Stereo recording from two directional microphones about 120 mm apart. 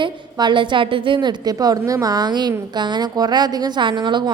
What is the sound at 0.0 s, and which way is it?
A woman's voice, 40° right (ahead or behind).